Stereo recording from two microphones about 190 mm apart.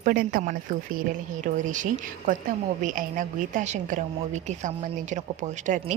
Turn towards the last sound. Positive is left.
turn(degrees=-40)  # may be behind; listen again after turning